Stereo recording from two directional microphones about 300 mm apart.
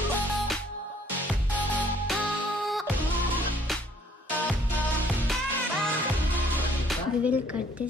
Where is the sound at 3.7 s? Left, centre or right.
Centre.